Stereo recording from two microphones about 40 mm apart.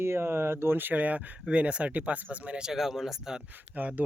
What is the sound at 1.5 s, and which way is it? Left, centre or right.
Speech, right.